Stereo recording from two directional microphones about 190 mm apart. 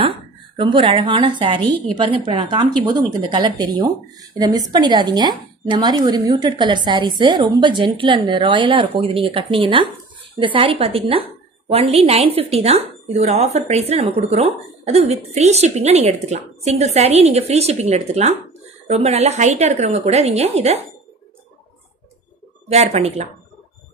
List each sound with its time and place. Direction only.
0.6 s a woman's voice: 25° right (ahead or behind)
22.7 s speech: 35° right (ahead or behind)